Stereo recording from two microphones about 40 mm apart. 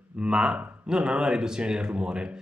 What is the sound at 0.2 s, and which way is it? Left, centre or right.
Speech, right.